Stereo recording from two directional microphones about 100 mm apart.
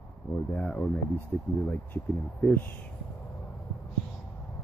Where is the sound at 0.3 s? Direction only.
10° left (ahead or behind).